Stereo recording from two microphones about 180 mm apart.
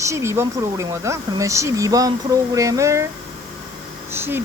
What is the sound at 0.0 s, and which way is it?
Speech, 15° right (ahead or behind).